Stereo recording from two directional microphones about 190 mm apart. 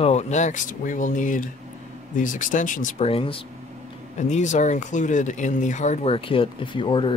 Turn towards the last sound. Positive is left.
turn(degrees=25)  # may be behind; listen again after turning